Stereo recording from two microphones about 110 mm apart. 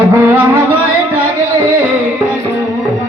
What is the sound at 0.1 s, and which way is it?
Music, 20° right (ahead or behind).